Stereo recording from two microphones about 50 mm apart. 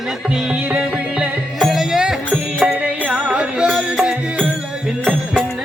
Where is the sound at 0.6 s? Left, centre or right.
Right.